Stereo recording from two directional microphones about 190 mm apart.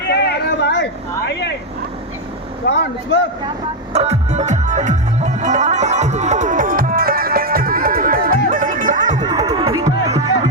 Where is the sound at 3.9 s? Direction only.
35° right (ahead or behind).